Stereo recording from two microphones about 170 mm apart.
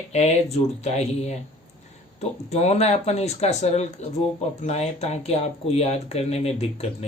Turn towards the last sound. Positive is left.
turn(degrees=40)  # may be behind; listen again after turning